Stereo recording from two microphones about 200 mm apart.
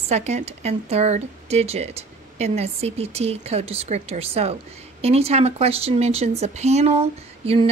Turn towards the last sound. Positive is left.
turn(degrees=-30)  # may be behind; listen again after turning